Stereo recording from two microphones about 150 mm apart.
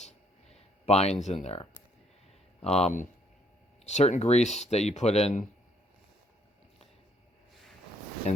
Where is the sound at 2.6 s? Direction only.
45° left (ahead or behind).